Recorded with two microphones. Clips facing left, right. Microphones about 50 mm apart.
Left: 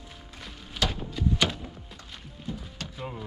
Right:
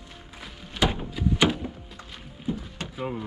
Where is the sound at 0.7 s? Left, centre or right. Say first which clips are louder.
Right 4 dB; right.